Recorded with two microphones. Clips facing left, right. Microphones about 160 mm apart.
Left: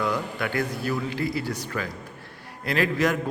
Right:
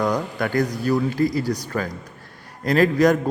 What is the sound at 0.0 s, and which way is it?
A man's voice, 40° right (ahead or behind).